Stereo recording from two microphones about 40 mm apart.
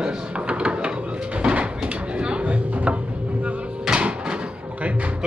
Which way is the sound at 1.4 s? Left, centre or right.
Right.